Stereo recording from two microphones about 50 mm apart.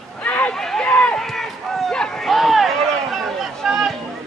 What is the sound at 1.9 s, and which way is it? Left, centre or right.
Run, centre.